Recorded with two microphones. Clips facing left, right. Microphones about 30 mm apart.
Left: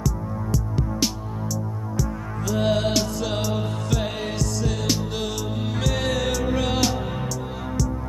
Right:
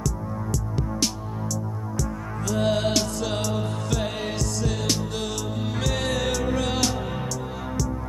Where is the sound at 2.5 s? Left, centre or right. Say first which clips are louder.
Left 1 dB; centre.